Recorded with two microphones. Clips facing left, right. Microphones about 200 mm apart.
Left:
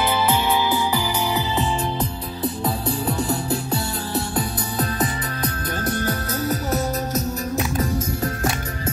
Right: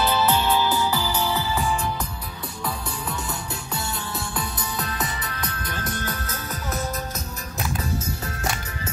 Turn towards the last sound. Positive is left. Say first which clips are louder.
# left 6 dB
turn(degrees=40)  # may be behind; listen again after turning